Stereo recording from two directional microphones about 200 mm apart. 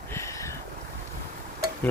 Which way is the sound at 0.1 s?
15° left (ahead or behind).